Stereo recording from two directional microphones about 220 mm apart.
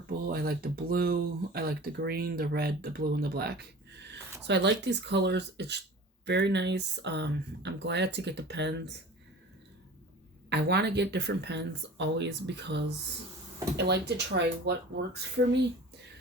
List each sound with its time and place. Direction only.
0.3 s speech: 45° right (ahead or behind)
10.5 s speech: 50° right (ahead or behind)